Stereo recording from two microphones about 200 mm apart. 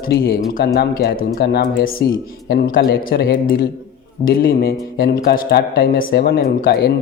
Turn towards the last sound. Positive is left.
turn(degrees=50)  # may be behind; listen again after turning